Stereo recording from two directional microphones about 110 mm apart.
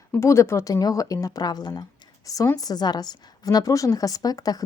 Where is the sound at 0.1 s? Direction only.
25° left (ahead or behind).